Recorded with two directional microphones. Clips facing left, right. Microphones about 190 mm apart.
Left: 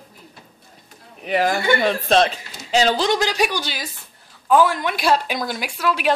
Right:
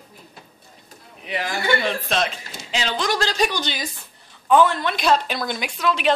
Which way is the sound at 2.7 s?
40° left (ahead or behind).